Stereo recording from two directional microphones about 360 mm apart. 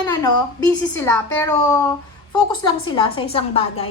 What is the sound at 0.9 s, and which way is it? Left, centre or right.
Speech, centre.